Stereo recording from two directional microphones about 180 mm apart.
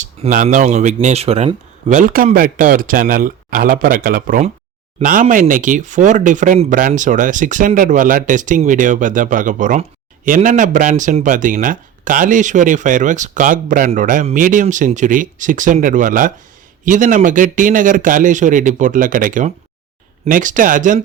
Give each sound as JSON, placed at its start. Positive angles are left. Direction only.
{"t": 0.0, "sound": "speech", "side_deg": -45}